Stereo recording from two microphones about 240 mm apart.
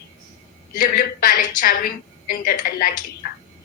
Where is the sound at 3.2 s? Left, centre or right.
Left.